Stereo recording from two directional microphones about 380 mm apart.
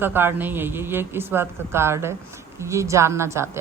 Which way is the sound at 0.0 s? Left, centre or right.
Centre.